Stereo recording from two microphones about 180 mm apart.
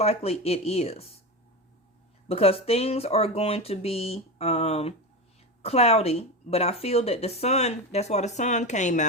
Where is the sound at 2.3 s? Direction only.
35° left (ahead or behind).